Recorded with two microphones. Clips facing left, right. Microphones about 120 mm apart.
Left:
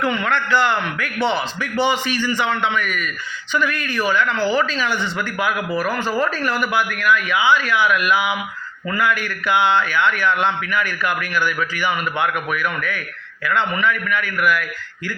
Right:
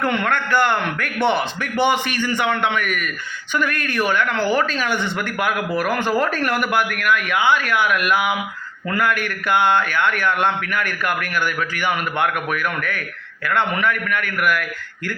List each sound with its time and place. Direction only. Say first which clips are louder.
0.0 s a man's voice: even; 55° right (ahead or behind)